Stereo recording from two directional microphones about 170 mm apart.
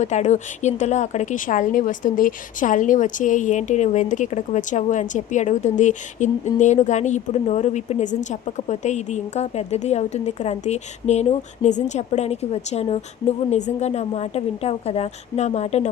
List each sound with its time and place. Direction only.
0.0 s speech: 45° left (ahead or behind)